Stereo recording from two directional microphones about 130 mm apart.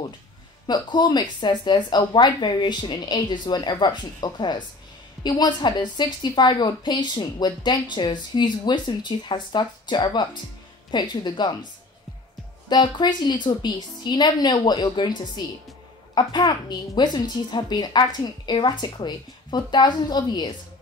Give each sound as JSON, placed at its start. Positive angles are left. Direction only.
{"t": 0.7, "sound": "a woman's voice", "side_deg": 35}
{"t": 12.6, "sound": "a woman's voice", "side_deg": 35}